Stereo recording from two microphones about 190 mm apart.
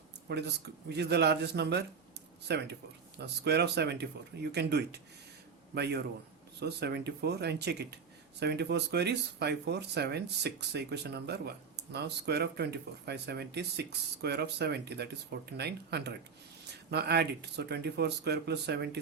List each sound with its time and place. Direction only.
0.3 s speech: 60° right (ahead or behind)